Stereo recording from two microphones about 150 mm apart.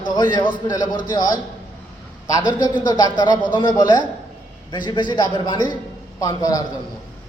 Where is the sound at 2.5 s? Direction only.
25° left (ahead or behind).